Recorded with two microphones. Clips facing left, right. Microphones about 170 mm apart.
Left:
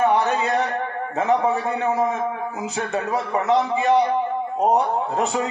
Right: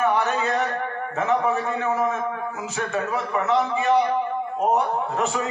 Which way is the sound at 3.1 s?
35° left (ahead or behind).